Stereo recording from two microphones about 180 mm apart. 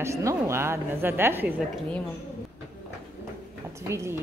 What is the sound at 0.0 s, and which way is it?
A woman's voice, 15° right (ahead or behind).